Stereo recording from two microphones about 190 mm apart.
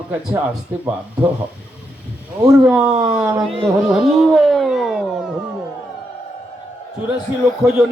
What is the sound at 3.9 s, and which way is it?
Music, centre (ahead or behind).